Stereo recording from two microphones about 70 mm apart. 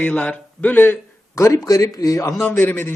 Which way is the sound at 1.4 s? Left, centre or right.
Left.